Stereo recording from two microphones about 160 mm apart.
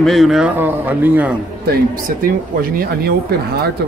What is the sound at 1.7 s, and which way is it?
Speech, 65° right (ahead or behind).